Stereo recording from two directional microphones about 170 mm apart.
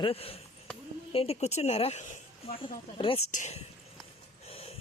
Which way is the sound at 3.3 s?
45° left (ahead or behind).